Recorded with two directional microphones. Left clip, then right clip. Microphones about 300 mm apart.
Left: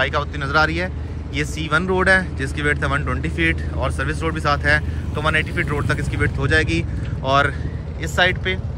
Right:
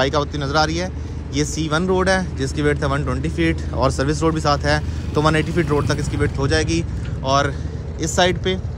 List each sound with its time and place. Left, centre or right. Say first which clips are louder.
0.0 s speech: right 1 dB; centre